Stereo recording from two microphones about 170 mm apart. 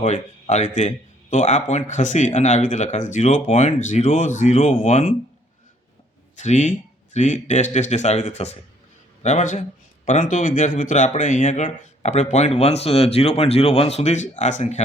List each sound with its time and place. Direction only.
0.0 s a man's voice: 40° left (ahead or behind)
6.3 s a man's voice: 45° left (ahead or behind)